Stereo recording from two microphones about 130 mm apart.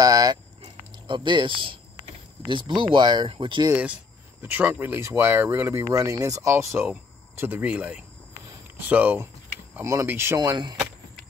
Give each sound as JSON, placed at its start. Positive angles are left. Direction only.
{"t": 0.0, "sound": "a sound", "side_deg": -30}
{"t": 2.4, "sound": "speech", "side_deg": -40}
{"t": 3.7, "sound": "speech", "side_deg": -10}